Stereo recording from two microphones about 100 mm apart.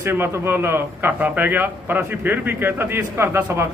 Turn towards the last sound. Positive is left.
turn(degrees=-25)  # may be behind; listen again after turning